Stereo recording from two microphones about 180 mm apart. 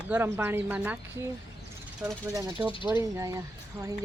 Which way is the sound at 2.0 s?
20° right (ahead or behind).